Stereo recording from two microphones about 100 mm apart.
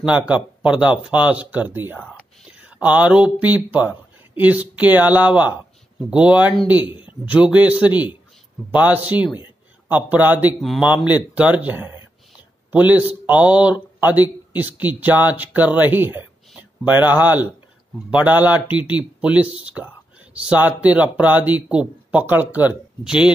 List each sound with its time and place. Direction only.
0.3 s a man's voice: 10° right (ahead or behind)